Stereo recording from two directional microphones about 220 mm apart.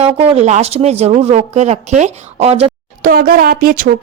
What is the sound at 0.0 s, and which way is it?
Speech, 30° right (ahead or behind).